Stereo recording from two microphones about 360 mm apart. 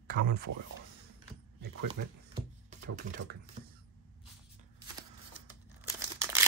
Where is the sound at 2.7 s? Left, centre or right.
Right.